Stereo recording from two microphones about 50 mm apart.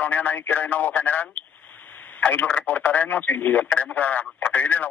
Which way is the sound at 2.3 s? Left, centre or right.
Left.